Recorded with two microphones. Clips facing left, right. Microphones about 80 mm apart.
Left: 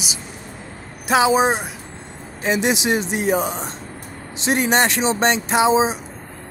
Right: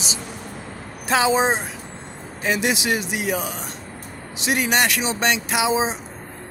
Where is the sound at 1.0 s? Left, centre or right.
Centre.